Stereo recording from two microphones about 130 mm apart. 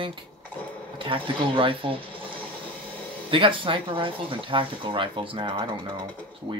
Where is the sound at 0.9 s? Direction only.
40° right (ahead or behind).